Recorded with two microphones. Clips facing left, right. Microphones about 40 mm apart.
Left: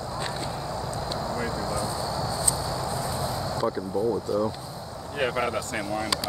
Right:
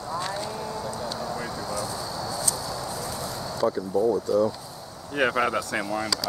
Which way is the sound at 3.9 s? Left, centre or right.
Centre.